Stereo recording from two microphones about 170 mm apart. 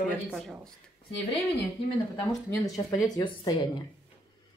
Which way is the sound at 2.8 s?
25° left (ahead or behind).